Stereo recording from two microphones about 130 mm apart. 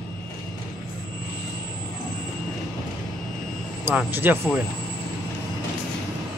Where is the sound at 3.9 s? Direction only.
15° right (ahead or behind).